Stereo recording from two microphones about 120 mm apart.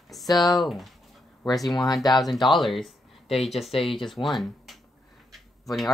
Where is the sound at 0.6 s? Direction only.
Centre (ahead or behind).